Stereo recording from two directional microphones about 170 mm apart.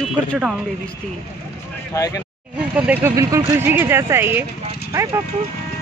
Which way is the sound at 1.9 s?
20° left (ahead or behind).